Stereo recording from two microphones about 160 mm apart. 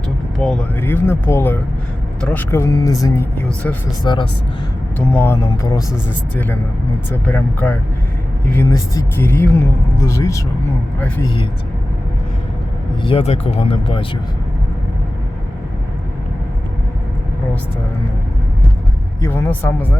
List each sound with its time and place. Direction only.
0.3 s speech: centre (ahead or behind)
0.8 s speech: 15° left (ahead or behind)
4.9 s speech: 15° left (ahead or behind)
7.1 s speech: 10° left (ahead or behind)
13.0 s speech: 35° left (ahead or behind)
19.2 s speech: 15° left (ahead or behind)